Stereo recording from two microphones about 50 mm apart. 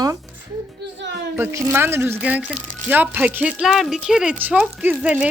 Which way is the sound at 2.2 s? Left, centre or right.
Right.